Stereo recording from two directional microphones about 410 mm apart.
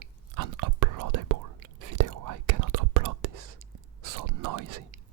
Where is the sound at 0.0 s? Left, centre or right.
Right.